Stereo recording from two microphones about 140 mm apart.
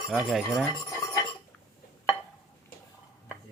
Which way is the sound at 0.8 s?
25° left (ahead or behind).